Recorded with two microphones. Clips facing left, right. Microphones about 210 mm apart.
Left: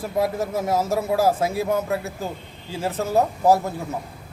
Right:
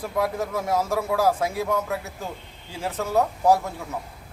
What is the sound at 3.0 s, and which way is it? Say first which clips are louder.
Speech: left 2 dB; 25° left (ahead or behind).